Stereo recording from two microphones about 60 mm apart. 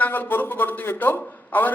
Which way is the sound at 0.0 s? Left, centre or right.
Left.